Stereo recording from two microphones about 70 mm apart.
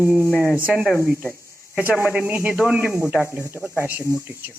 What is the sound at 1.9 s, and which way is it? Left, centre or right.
Speech, right.